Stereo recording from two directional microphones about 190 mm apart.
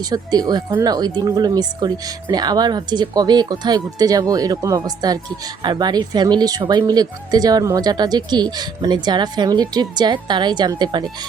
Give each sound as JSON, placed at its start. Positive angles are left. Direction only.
{"t": 0.1, "sound": "speech", "side_deg": -20}